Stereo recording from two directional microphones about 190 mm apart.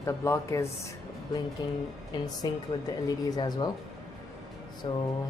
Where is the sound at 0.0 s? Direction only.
15° left (ahead or behind).